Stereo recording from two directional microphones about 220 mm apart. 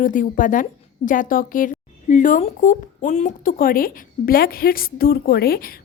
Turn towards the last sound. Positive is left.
turn(degrees=45)  # may be behind; listen again after turning